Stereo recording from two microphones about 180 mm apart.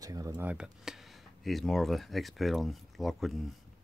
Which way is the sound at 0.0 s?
20° right (ahead or behind).